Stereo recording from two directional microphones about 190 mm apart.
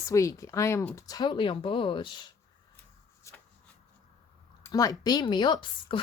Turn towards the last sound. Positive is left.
turn(degrees=25)  # may be behind; listen again after turning